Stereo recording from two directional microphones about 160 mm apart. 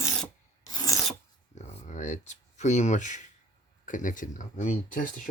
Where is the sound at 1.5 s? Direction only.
50° left (ahead or behind).